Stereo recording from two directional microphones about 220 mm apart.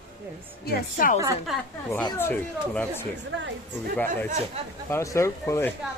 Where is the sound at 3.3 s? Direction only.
55° right (ahead or behind).